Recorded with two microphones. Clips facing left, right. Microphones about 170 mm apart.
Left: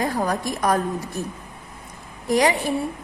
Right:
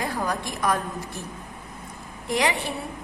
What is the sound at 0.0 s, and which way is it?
Speech, 40° left (ahead or behind).